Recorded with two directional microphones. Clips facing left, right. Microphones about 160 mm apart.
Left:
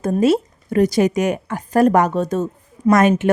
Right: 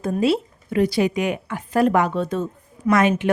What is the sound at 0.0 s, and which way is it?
A woman's voice, 45° left (ahead or behind).